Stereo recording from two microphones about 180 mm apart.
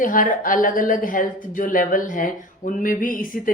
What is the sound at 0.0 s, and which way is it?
A woman's voice, 45° left (ahead or behind).